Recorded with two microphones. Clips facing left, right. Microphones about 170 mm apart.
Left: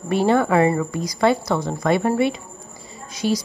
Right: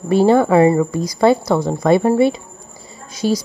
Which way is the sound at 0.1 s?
35° right (ahead or behind).